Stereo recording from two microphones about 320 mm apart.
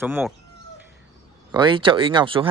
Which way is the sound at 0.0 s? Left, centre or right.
Centre.